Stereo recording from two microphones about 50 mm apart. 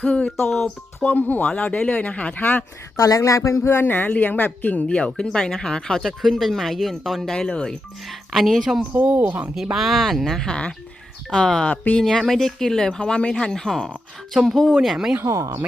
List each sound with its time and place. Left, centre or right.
0.0 s speech: left
0.4 s speech: centre
1.0 s speech: left
1.5 s speech: left
3.0 s speech: left
3.7 s speech: left; by 7.3 s centre
7.3 s speech: centre
8.3 s speech: centre
8.9 s speech: right
9.7 s speech: centre
10.5 s speech: centre
12.0 s speech: centre
15.2 s speech: right